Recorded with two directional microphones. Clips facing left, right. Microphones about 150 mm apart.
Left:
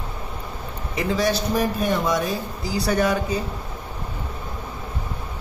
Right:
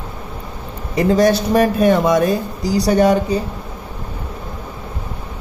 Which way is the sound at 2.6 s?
35° right (ahead or behind).